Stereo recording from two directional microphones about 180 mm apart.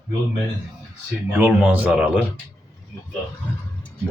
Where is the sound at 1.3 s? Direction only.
10° right (ahead or behind).